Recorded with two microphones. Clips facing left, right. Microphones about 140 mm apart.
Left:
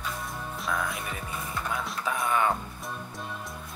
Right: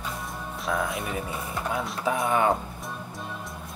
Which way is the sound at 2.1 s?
25° right (ahead or behind).